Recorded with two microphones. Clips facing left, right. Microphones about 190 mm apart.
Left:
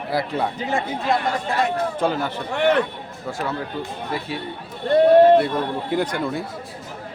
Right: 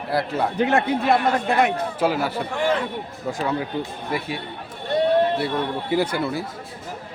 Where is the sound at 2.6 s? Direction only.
65° left (ahead or behind).